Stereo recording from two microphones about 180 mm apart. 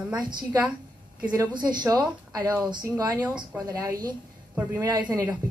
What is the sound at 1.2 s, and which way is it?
A woman's voice, 20° right (ahead or behind).